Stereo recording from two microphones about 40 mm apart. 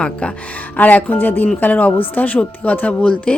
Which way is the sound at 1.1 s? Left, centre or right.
Left.